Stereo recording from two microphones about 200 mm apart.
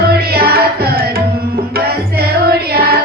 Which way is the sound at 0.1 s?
50° right (ahead or behind).